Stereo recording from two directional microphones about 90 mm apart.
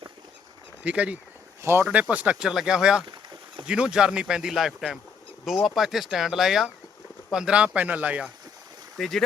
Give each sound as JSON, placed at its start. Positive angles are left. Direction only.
{"t": 0.9, "sound": "speech", "side_deg": -15}
{"t": 1.6, "sound": "speech", "side_deg": -30}
{"t": 1.9, "sound": "speech", "side_deg": -15}
{"t": 9.0, "sound": "speech", "side_deg": 5}